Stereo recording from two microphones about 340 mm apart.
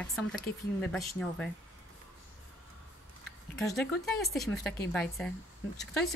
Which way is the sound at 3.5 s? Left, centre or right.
Centre.